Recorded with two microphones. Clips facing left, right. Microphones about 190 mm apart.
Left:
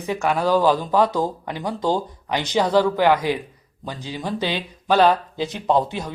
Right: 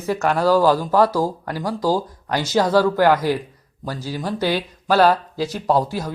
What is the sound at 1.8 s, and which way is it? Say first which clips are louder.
Speech: right 1 dB; 5° right (ahead or behind).